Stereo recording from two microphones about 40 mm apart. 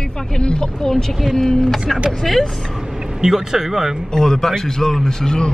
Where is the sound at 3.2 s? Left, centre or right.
Centre.